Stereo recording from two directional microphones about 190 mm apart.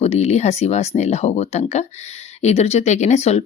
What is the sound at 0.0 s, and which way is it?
Speech, 35° left (ahead or behind).